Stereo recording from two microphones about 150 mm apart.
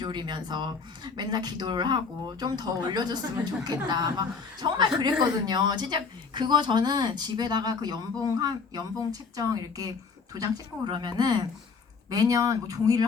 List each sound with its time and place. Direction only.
0.0 s speech: 30° right (ahead or behind)